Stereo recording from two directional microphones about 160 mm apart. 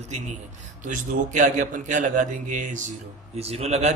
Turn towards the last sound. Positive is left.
turn(degrees=-45)  # may be behind; listen again after turning